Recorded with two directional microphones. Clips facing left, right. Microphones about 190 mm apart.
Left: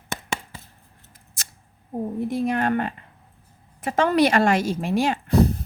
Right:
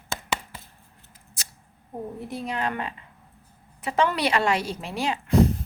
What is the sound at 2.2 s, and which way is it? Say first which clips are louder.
A woman's voice: left 7 dB; 50° left (ahead or behind).